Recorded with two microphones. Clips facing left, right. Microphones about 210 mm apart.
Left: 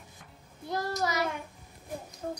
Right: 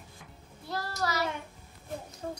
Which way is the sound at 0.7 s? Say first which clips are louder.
Left 2 dB; 20° left (ahead or behind).